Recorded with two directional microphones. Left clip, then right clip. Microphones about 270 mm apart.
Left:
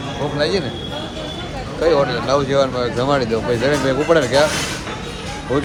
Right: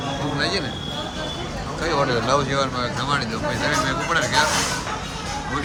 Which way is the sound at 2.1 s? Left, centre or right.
Centre.